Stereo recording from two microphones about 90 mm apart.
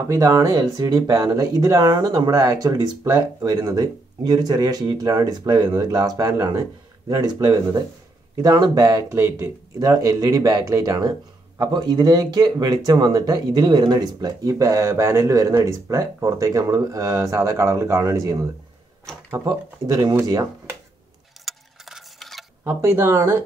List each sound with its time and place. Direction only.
0.1 s speech: 35° right (ahead or behind)
19.4 s speech: 50° right (ahead or behind)
21.5 s a sound: centre (ahead or behind)
22.6 s speech: 30° right (ahead or behind)